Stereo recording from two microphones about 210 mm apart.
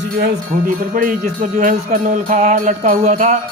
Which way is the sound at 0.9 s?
40° right (ahead or behind).